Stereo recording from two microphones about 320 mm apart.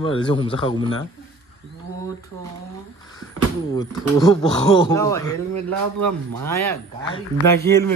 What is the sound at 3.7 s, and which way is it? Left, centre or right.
Speech, centre.